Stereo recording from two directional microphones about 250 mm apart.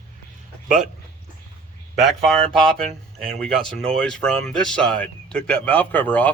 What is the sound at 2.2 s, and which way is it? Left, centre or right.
Speech, centre.